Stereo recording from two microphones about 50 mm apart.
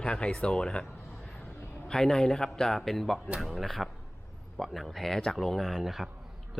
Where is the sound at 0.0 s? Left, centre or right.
Left.